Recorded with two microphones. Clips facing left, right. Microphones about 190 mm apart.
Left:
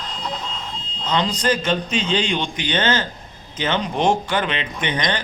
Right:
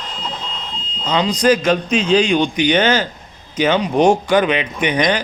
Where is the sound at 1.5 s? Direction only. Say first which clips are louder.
Right 5 dB; 90° right.